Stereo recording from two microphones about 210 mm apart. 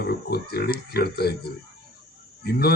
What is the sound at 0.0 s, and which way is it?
A man's voice, 50° left (ahead or behind).